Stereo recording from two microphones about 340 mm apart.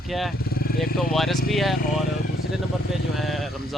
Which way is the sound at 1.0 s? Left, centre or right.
Centre.